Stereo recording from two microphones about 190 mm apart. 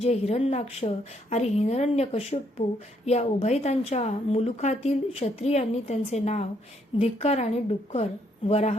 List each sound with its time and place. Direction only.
0.0 s a woman's voice: 35° left (ahead or behind)